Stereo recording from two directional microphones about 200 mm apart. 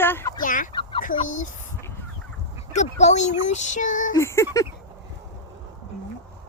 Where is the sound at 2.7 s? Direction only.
35° left (ahead or behind).